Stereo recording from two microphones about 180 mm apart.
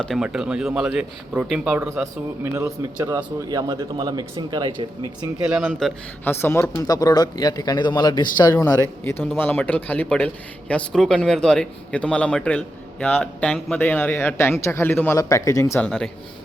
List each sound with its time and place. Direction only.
0.0 s speech: centre (ahead or behind); by 4.9 s 25° right (ahead or behind)
5.5 s speech: 5° right (ahead or behind)
6.2 s speech: 10° left (ahead or behind)
8.6 s a man's voice: 10° left (ahead or behind)
15.8 s speech: 5° left (ahead or behind)